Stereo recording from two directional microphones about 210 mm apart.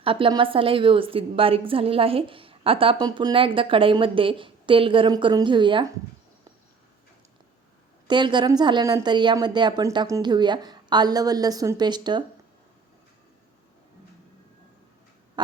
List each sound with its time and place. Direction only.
0.0 s a woman's voice: 25° right (ahead or behind)
8.0 s a woman's voice: 20° right (ahead or behind)